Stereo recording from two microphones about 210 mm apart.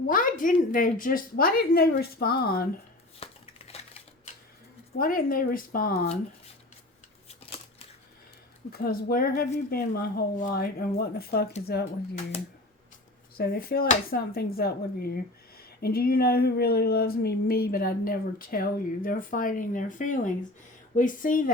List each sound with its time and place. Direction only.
0.1 s speech: 40° left (ahead or behind)
3.7 s typewriter: 30° left (ahead or behind)
4.9 s speech: 45° left (ahead or behind)
7.3 s scissors: 30° left (ahead or behind)
8.8 s speech: 45° left (ahead or behind)
13.3 s speech: 45° left (ahead or behind)